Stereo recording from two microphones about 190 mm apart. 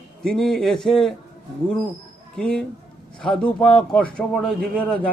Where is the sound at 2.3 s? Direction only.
5° left (ahead or behind).